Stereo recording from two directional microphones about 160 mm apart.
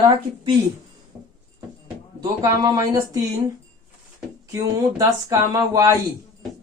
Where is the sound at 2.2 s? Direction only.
25° right (ahead or behind).